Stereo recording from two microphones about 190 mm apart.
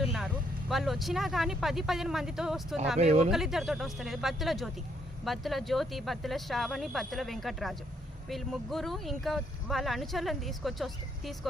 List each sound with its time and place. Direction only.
0.7 s speech: centre (ahead or behind)
3.0 s speech: 35° right (ahead or behind)
3.2 s speech: centre (ahead or behind)